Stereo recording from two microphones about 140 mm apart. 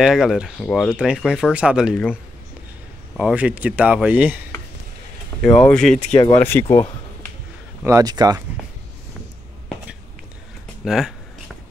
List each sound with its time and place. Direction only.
0.0 s speech: centre (ahead or behind)
3.2 s speech: 5° right (ahead or behind)
5.3 s a sound: 10° left (ahead or behind)
5.7 s speech: 5° left (ahead or behind)
5.9 s speech: 55° left (ahead or behind)
6.3 s speech: 15° left (ahead or behind)
7.8 s speech: 25° right (ahead or behind)
10.8 s speech: 5° right (ahead or behind)